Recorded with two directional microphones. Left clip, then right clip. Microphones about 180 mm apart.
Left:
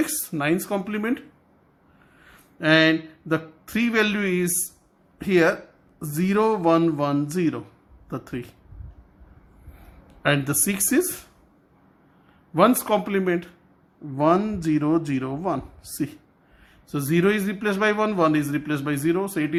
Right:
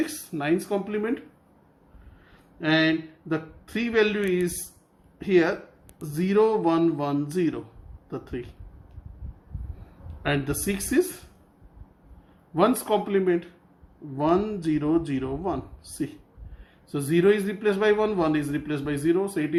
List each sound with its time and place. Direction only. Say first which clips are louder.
0.0 s a man's voice: left 4 dB; 30° left (ahead or behind)
2.2 s a man's voice: left 5 dB; 35° left (ahead or behind)
10.2 s a man's voice: left 4 dB; 30° left (ahead or behind)
12.5 s a man's voice: left 3 dB; 30° left (ahead or behind)